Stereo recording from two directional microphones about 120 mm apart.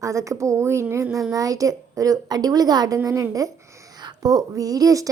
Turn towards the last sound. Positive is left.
turn(degrees=-30)  # may be behind; listen again after turning